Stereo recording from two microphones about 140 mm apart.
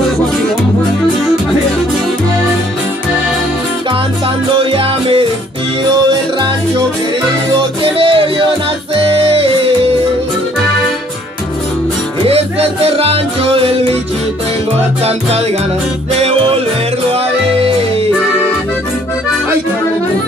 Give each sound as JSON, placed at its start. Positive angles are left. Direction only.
{"t": 4.6, "sound": "music", "side_deg": -40}
{"t": 7.5, "sound": "music", "side_deg": -40}
{"t": 12.3, "sound": "music", "side_deg": -45}
{"t": 15.0, "sound": "music", "side_deg": -45}